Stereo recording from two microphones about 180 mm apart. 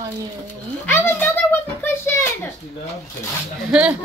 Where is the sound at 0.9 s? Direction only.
10° left (ahead or behind).